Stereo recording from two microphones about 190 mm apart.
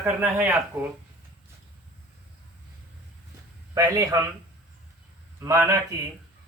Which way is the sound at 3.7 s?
15° right (ahead or behind).